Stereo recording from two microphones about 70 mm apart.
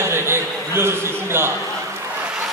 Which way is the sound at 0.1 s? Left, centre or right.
Right.